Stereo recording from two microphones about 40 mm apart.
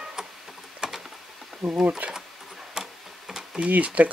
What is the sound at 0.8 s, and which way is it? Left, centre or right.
Patter, centre.